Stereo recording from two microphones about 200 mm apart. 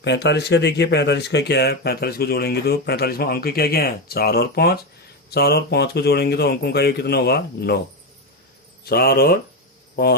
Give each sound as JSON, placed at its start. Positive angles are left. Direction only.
{"t": 0.0, "sound": "speech", "side_deg": 60}
{"t": 8.8, "sound": "speech", "side_deg": 50}